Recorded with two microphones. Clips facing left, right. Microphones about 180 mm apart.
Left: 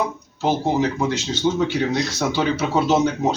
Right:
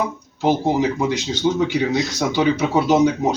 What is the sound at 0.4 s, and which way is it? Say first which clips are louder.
A man's voice: right 2 dB; 15° right (ahead or behind).